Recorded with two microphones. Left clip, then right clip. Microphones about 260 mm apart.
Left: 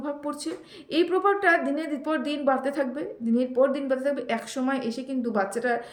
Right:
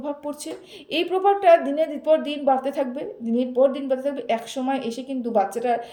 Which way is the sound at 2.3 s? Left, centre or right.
Left.